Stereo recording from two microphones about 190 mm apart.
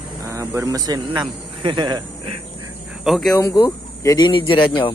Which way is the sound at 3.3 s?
20° left (ahead or behind).